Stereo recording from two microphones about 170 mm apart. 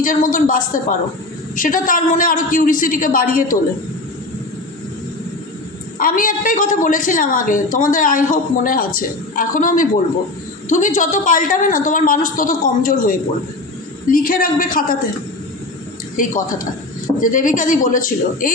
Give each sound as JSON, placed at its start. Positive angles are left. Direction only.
{"t": 0.0, "sound": "a woman's voice", "side_deg": 50}
{"t": 6.0, "sound": "a woman's voice", "side_deg": 55}
{"t": 16.1, "sound": "a woman's voice", "side_deg": 55}